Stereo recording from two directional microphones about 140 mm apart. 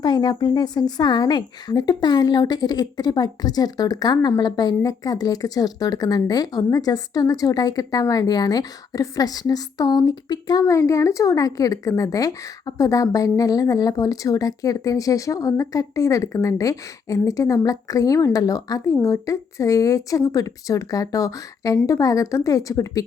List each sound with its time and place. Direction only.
0.0 s a woman's voice: 30° left (ahead or behind)